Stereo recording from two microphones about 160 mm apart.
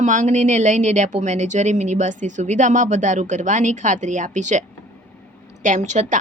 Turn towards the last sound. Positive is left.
turn(degrees=-50)  # may be behind; listen again after turning